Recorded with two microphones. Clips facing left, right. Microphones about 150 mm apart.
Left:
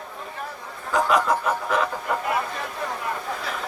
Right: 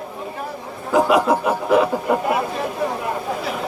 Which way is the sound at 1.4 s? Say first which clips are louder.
Right 7 dB; 15° right (ahead or behind).